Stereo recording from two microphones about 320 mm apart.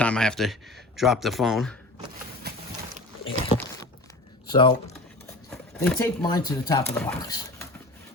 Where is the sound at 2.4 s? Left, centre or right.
Right.